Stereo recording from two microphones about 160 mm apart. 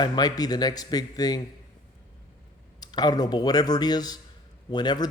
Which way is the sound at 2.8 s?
25° left (ahead or behind).